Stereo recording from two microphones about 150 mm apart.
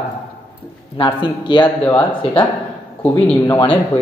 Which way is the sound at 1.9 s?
10° left (ahead or behind).